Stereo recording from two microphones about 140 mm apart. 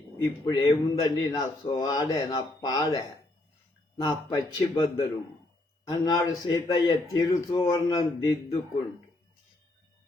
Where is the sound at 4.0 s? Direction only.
25° left (ahead or behind).